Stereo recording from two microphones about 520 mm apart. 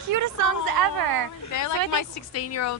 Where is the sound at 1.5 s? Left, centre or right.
Left.